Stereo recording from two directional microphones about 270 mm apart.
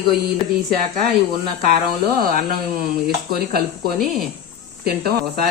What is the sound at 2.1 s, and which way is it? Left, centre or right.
Speech, right.